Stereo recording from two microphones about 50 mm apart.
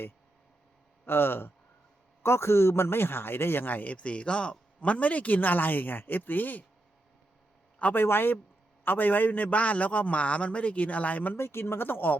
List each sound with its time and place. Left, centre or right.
1.0 s a man's voice: left
2.2 s a man's voice: left
3.9 s speech: left
7.9 s a man's voice: left
11.3 s speech: left